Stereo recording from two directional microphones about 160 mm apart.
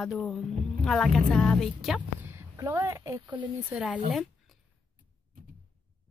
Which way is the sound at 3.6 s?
5° right (ahead or behind).